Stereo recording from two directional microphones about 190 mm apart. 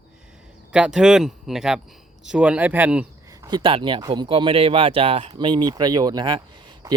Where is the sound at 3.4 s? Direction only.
25° right (ahead or behind).